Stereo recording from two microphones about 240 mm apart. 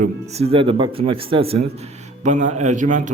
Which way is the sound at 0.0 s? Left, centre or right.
Right.